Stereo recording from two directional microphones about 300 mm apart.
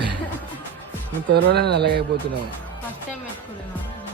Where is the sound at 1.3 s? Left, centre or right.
Right.